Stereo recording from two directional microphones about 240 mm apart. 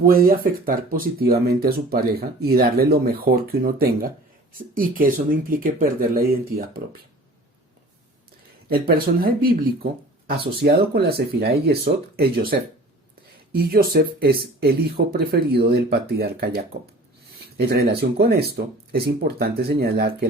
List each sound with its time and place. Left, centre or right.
0.0 s speech: right
8.7 s speech: right
17.9 s speech: right